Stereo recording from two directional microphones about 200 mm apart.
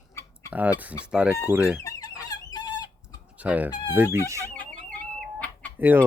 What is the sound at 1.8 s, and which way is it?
Squeak, 20° left (ahead or behind).